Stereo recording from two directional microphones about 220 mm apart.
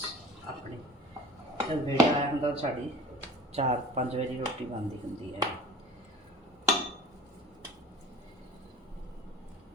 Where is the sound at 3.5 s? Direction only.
30° right (ahead or behind).